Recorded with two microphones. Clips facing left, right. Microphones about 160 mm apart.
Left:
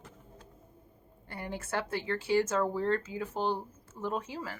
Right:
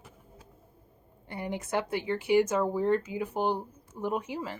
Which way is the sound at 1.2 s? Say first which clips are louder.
Right 4 dB; 20° right (ahead or behind).